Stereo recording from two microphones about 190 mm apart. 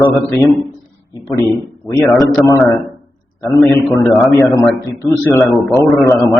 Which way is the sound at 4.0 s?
15° left (ahead or behind).